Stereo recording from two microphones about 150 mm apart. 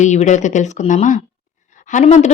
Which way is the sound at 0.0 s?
50° left (ahead or behind).